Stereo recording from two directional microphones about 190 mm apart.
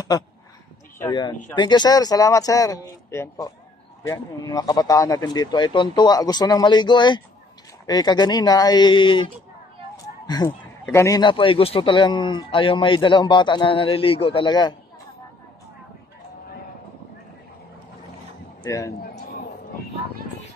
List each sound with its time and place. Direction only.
1.5 s speech: 25° left (ahead or behind)
18.6 s a man's voice: 15° left (ahead or behind)
18.9 s a sound: 50° left (ahead or behind)